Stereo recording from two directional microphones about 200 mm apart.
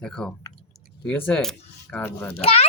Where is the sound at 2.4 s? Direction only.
30° left (ahead or behind).